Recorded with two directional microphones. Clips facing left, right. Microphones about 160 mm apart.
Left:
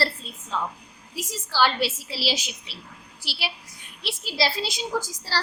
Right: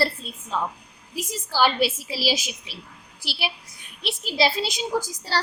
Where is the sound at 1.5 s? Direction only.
15° right (ahead or behind).